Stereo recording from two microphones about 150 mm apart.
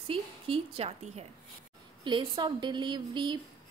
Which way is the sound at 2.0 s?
30° right (ahead or behind).